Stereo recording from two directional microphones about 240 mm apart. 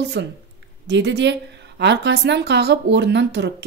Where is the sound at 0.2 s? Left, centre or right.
Right.